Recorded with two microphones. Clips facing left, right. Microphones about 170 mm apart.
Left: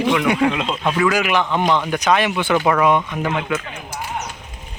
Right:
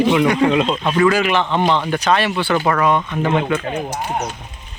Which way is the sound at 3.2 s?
30° right (ahead or behind).